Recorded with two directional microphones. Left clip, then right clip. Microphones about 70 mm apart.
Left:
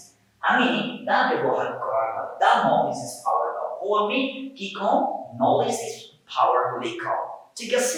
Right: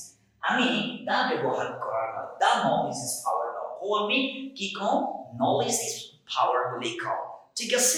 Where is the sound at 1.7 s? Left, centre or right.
Left.